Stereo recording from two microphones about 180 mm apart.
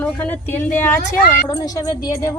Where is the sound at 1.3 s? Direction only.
20° left (ahead or behind).